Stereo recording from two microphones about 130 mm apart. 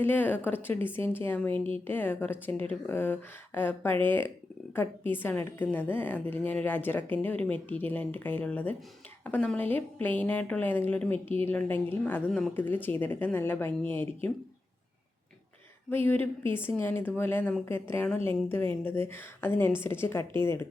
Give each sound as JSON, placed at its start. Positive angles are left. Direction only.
{"t": 0.0, "sound": "a woman's voice", "side_deg": 15}
{"t": 15.9, "sound": "a woman's voice", "side_deg": 15}